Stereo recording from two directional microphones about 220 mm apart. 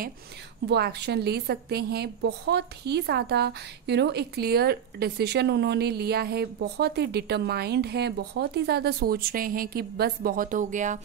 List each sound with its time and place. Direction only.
0.7 s a woman's voice: 50° right (ahead or behind)